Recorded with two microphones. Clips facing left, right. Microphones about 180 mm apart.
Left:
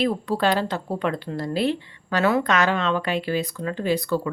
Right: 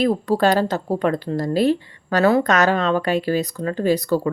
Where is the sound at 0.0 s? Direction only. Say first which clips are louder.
Right 4 dB; 40° right (ahead or behind).